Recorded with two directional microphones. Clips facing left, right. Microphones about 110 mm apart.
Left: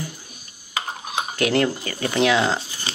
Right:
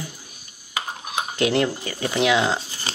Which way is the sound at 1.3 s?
20° right (ahead or behind).